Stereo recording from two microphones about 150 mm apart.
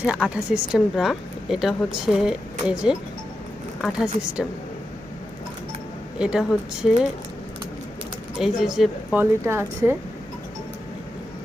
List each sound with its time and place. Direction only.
0.0 s a woman's voice: 5° right (ahead or behind)
6.1 s a woman's voice: 5° right (ahead or behind)
8.4 s a woman's voice: 5° right (ahead or behind)
9.4 s speech: 15° right (ahead or behind)